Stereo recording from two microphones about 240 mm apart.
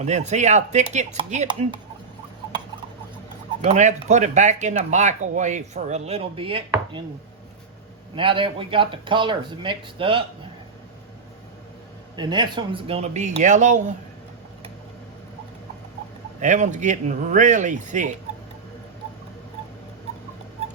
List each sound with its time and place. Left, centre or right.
0.0 s speech: right
3.6 s speech: right
8.1 s speech: right
12.1 s speech: centre
16.4 s speech: right